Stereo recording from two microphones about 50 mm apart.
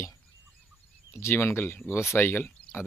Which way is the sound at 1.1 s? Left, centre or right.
Left.